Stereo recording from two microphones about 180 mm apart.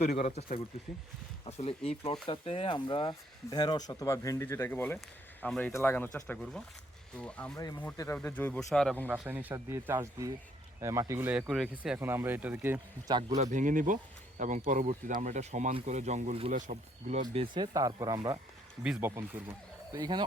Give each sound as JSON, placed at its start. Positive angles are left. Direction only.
{"t": 0.0, "sound": "speech", "side_deg": 40}
{"t": 1.5, "sound": "speech", "side_deg": 35}
{"t": 7.5, "sound": "speech", "side_deg": 20}
{"t": 9.0, "sound": "speech", "side_deg": -10}
{"t": 11.9, "sound": "speech", "side_deg": -15}
{"t": 13.3, "sound": "speech", "side_deg": -40}
{"t": 17.3, "sound": "speech", "side_deg": -25}
{"t": 18.8, "sound": "speech", "side_deg": -10}
{"t": 19.9, "sound": "speech", "side_deg": -20}